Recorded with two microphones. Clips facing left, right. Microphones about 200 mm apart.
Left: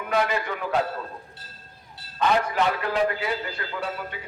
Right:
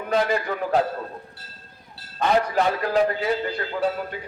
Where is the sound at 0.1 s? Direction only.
35° right (ahead or behind).